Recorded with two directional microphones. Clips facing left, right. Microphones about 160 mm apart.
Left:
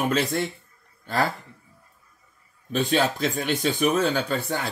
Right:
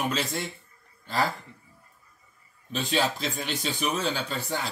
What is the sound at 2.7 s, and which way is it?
Speech, 50° left (ahead or behind).